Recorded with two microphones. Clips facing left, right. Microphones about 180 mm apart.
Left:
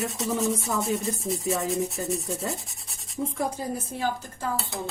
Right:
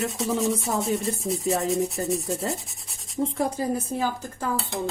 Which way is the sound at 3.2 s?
30° right (ahead or behind).